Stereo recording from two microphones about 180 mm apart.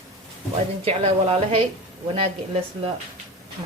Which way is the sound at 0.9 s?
35° right (ahead or behind).